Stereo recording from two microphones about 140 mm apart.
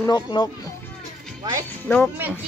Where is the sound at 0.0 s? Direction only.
30° left (ahead or behind).